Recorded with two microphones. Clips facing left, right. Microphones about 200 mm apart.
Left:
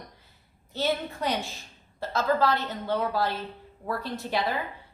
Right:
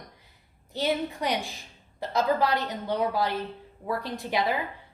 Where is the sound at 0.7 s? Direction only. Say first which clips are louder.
Right 1 dB; 15° right (ahead or behind).